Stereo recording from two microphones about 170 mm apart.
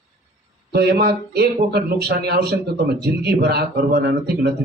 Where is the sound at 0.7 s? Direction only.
70° right (ahead or behind).